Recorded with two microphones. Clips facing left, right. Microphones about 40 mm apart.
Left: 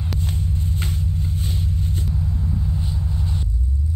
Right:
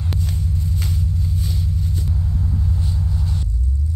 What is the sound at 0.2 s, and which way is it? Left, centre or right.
Vehicle, left.